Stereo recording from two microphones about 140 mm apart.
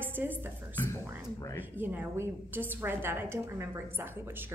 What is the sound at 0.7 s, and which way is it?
Speech, 15° left (ahead or behind).